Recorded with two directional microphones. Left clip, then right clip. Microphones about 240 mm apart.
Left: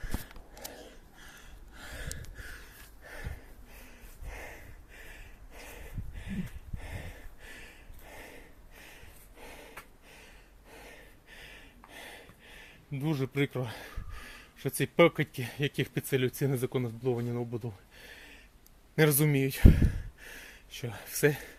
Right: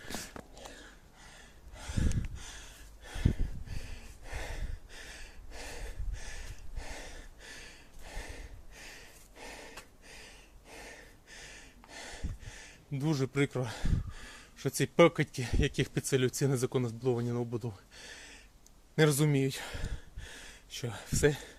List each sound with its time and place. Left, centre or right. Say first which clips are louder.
4.3 s gasp: right 2 dB; centre
5.5 s a sound: right 2 dB; right; by 9.0 s centre
9.4 s gasp: right 1 dB; centre
18.9 s speech: left 1 dB; centre